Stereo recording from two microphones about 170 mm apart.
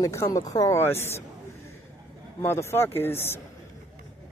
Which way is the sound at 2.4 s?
15° left (ahead or behind).